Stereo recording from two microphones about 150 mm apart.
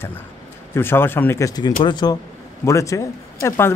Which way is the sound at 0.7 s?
15° left (ahead or behind).